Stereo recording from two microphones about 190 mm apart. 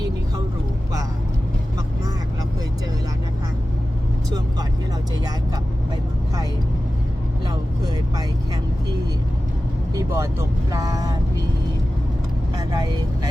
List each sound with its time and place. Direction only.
9.9 s vehicle: 15° right (ahead or behind)
10.7 s speech: 15° right (ahead or behind)